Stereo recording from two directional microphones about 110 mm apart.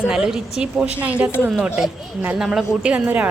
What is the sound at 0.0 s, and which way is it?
A woman's voice, 5° right (ahead or behind).